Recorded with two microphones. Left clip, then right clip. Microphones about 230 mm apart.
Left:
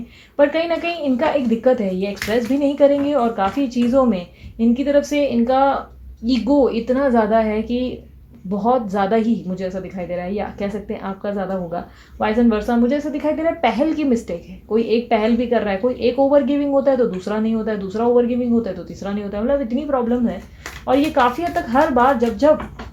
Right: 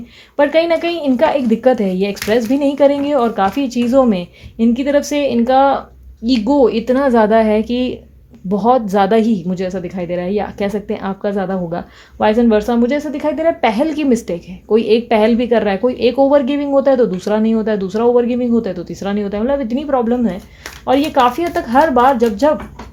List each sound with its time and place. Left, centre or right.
0.3 s a woman's voice: right